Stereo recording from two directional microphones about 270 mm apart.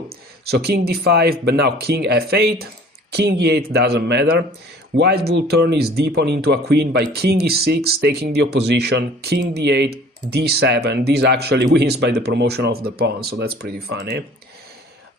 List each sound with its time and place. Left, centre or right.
0.1 s speech: right